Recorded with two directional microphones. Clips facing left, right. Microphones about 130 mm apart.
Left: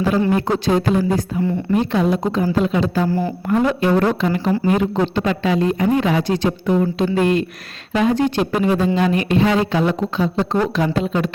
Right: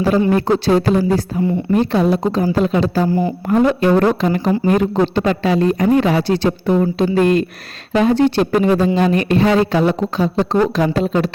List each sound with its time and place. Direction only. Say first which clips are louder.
0.3 s speech: right 3 dB; 35° right (ahead or behind)
3.1 s a woman's voice: right 3 dB; 15° right (ahead or behind)
3.5 s speech: right 3 dB; 35° right (ahead or behind)
7.9 s speech: right 3 dB; 35° right (ahead or behind)